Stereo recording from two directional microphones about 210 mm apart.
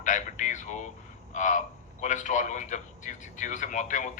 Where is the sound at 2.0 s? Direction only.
35° left (ahead or behind).